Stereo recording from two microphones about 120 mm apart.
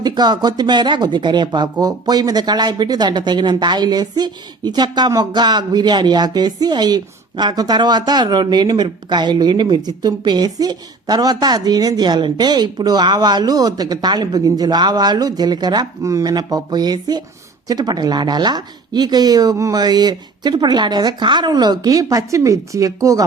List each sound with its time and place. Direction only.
0.0 s speech: 35° right (ahead or behind)